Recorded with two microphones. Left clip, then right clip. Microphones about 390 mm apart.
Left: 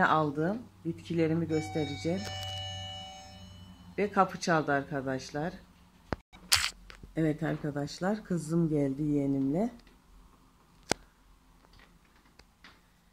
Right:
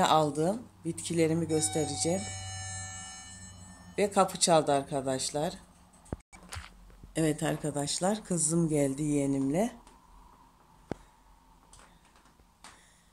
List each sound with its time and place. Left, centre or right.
0.0 s speech: centre
3.9 s speech: centre
6.0 s single-lens reflex camera: left
7.2 s speech: centre
10.9 s a sound: left